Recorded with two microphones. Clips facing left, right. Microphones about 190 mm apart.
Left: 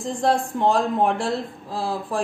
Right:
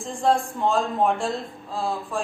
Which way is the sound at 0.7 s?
75° left (ahead or behind).